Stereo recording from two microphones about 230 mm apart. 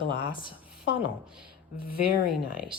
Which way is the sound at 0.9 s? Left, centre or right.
Centre.